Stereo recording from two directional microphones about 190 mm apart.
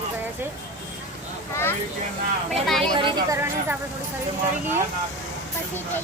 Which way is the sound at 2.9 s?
20° right (ahead or behind).